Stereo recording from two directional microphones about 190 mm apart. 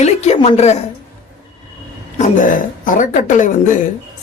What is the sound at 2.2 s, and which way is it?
A woman's voice, 45° left (ahead or behind).